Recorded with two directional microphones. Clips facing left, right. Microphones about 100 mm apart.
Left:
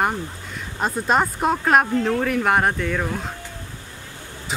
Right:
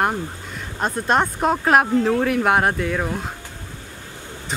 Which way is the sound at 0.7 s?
Centre (ahead or behind).